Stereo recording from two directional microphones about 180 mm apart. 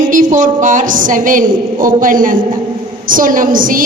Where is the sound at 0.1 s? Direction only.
45° right (ahead or behind).